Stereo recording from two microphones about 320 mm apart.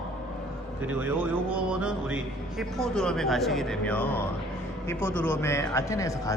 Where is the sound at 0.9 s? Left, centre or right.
Centre.